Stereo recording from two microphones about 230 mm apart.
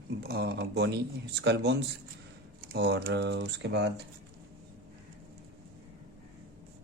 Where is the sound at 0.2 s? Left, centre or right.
Right.